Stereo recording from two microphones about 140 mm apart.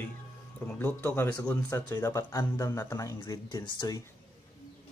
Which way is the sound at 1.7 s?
25° left (ahead or behind).